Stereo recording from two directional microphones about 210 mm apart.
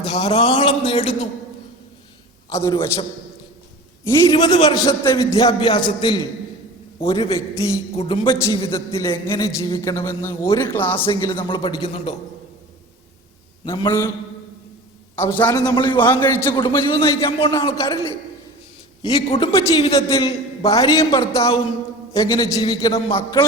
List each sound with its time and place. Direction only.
0.0 s a man's voice: 25° left (ahead or behind)
2.5 s a man's voice: 15° left (ahead or behind)
4.0 s a man's voice: 15° left (ahead or behind)
8.3 s a man's voice: 15° left (ahead or behind)
11.0 s a man's voice: 25° left (ahead or behind)
13.7 s a man's voice: 20° left (ahead or behind)
15.1 s a man's voice: 10° left (ahead or behind)
16.0 s a man's voice: 10° left (ahead or behind)
16.5 s a man's voice: 20° left (ahead or behind)
19.3 s a man's voice: 30° left (ahead or behind)
20.1 s a man's voice: 15° left (ahead or behind)